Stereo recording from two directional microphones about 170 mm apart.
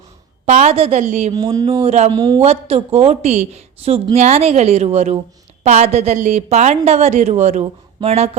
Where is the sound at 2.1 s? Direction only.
25° right (ahead or behind).